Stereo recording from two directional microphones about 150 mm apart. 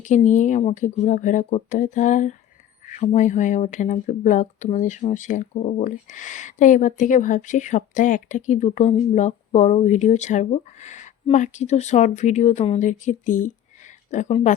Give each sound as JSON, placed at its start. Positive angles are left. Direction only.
{"t": 0.0, "sound": "speech", "side_deg": 55}